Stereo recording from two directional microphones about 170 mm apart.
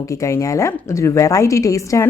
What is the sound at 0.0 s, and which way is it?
Speech, 20° left (ahead or behind).